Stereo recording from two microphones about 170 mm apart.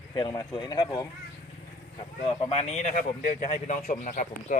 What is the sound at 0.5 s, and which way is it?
Speech, 25° left (ahead or behind).